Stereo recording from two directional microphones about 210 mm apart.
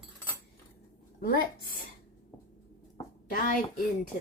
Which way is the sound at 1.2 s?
45° left (ahead or behind).